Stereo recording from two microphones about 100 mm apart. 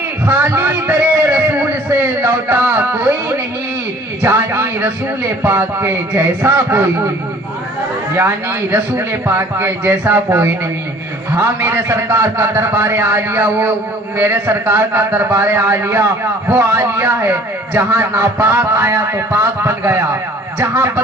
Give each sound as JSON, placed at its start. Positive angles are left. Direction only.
{"t": 0.3, "sound": "a sound", "side_deg": -20}
{"t": 5.4, "sound": "a man's voice", "side_deg": -25}
{"t": 8.7, "sound": "a man's voice", "side_deg": -25}